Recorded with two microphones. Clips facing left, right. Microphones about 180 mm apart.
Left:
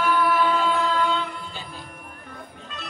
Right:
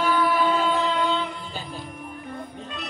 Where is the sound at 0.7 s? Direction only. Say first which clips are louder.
Even; 20° right (ahead or behind).